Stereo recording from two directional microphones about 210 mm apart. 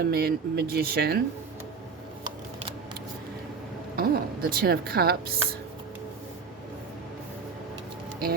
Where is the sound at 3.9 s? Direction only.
45° right (ahead or behind).